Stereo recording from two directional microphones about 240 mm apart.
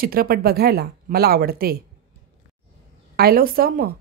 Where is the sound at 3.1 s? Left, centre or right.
Right.